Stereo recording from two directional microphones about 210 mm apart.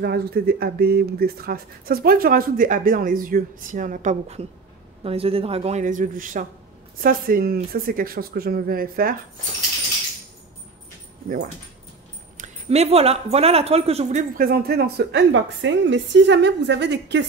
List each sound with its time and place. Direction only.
0.0 s speech: 50° right (ahead or behind)
12.4 s speech: 30° right (ahead or behind); by 17.2 s 55° right (ahead or behind)